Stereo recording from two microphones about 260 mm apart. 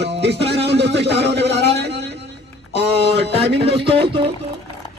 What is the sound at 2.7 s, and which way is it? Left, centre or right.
Music, right.